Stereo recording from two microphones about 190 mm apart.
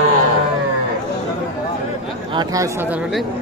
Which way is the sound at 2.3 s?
20° right (ahead or behind).